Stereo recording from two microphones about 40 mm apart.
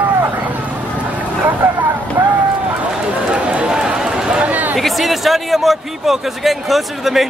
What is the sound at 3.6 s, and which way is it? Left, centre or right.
Run, right.